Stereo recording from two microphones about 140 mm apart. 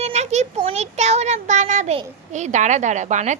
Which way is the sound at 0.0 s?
50° right (ahead or behind).